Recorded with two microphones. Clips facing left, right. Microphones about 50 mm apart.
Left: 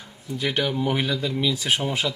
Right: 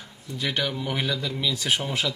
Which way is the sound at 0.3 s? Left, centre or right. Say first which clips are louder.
Left 3 dB; centre.